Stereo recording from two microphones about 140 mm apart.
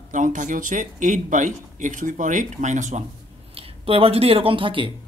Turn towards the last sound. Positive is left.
turn(degrees=-35)  # may be behind; listen again after turning